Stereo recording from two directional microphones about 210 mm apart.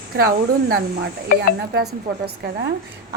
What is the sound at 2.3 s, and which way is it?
Speech, 50° right (ahead or behind).